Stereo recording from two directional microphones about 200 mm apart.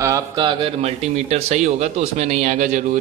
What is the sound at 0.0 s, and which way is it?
A man's voice, 20° right (ahead or behind).